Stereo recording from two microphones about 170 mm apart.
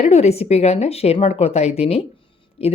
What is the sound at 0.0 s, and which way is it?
A woman's voice, 40° left (ahead or behind).